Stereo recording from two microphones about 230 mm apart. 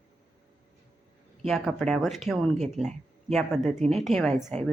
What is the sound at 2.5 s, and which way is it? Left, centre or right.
Speech, right.